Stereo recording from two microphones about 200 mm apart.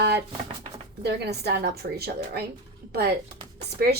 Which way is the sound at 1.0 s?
55° right (ahead or behind).